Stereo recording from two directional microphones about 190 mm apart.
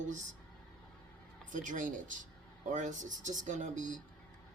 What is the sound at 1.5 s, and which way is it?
Speech, 40° right (ahead or behind).